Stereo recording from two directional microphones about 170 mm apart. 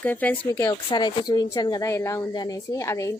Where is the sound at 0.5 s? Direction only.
25° left (ahead or behind).